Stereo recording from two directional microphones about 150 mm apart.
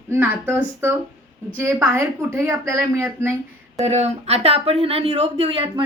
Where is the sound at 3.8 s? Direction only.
45° right (ahead or behind).